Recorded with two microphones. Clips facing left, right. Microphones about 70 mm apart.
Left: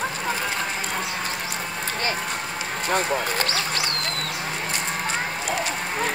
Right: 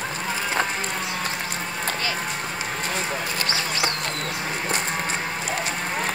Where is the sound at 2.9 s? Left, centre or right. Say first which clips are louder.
Left 8 dB; left.